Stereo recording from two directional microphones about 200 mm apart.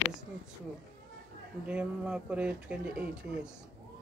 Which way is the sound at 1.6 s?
5° right (ahead or behind).